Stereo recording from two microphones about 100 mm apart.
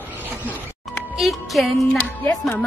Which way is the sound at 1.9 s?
15° left (ahead or behind).